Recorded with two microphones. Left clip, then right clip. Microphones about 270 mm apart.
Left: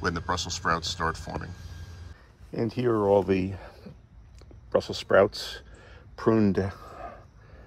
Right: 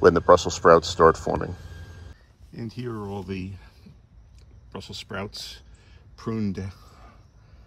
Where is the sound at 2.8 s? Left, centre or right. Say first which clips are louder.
Left 10 dB; left.